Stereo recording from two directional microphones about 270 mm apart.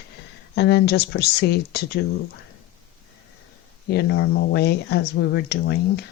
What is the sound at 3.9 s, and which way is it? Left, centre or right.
Speech, left.